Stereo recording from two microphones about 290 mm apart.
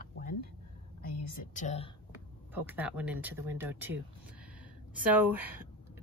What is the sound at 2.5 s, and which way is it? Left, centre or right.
Speech, centre.